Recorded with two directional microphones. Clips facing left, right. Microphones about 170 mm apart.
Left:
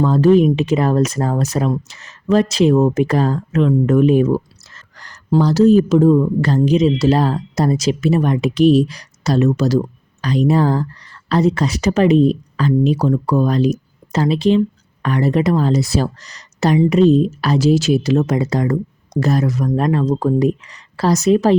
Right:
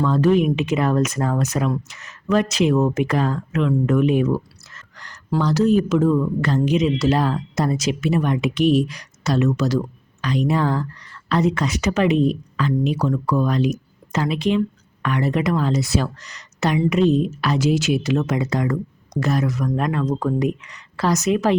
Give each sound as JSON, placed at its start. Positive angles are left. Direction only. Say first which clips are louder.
{"t": 0.0, "sound": "speech", "louder": "left 5 dB", "side_deg": 35}